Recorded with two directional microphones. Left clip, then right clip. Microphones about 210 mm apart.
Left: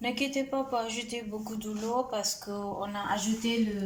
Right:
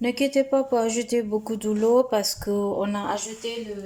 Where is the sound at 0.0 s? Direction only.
20° right (ahead or behind); by 3.0 s 40° right (ahead or behind).